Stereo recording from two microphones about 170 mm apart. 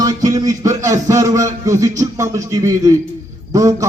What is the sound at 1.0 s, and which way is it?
A man's voice, 20° right (ahead or behind).